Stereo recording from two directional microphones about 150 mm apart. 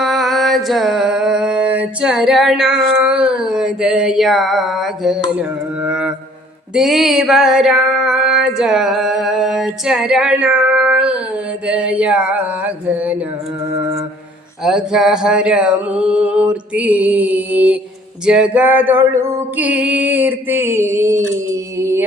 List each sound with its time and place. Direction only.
0.0 s music: centre (ahead or behind)
5.4 s mantra: 5° right (ahead or behind)
6.7 s a sound: centre (ahead or behind)
11.6 s music: 5° right (ahead or behind)
14.6 s music: 5° right (ahead or behind); by 22.0 s 20° right (ahead or behind)